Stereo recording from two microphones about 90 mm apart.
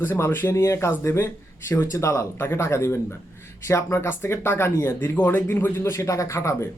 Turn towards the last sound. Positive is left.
turn(degrees=35)  # may be behind; listen again after turning